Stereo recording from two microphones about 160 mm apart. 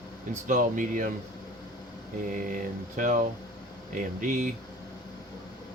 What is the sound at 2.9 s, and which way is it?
Speech, 55° right (ahead or behind).